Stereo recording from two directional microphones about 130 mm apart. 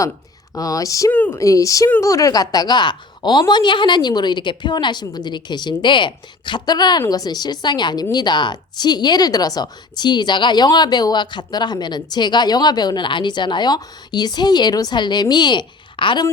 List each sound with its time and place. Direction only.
0.5 s speech: 25° left (ahead or behind)
1.1 s speech: 10° left (ahead or behind)
1.4 s a woman's voice: 25° left (ahead or behind)